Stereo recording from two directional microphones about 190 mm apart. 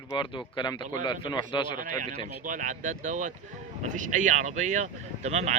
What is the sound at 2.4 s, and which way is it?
Speech, 45° right (ahead or behind).